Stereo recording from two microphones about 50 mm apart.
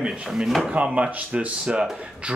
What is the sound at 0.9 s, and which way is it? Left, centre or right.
Speech, right.